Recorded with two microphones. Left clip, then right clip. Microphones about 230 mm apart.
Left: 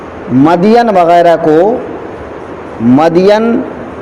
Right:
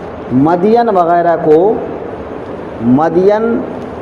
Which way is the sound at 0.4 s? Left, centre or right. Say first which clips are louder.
Left 3 dB; left.